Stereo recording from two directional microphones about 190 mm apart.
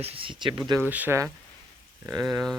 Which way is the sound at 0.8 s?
10° right (ahead or behind).